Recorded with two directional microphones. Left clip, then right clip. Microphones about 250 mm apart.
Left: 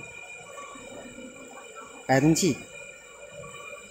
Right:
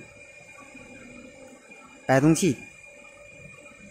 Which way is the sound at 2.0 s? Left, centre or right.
Right.